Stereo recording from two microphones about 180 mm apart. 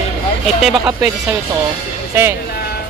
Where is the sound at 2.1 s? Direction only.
15° right (ahead or behind).